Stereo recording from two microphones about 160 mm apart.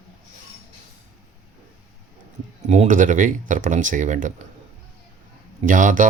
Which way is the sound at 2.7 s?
50° right (ahead or behind).